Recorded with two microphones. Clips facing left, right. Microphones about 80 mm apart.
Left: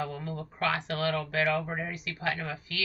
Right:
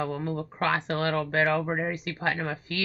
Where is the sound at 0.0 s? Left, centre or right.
Right.